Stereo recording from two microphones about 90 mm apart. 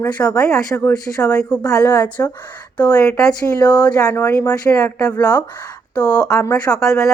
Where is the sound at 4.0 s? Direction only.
35° left (ahead or behind).